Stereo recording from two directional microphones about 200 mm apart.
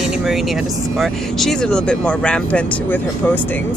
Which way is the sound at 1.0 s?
Centre (ahead or behind).